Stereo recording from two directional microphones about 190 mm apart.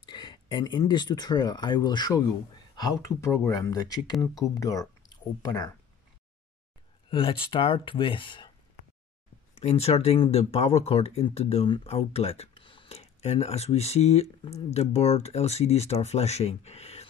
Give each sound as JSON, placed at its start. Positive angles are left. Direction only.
{"t": 0.0, "sound": "speech", "side_deg": 25}
{"t": 2.7, "sound": "a sound", "side_deg": 20}
{"t": 3.2, "sound": "speech", "side_deg": 15}
{"t": 7.1, "sound": "speech", "side_deg": 25}
{"t": 9.6, "sound": "speech", "side_deg": 35}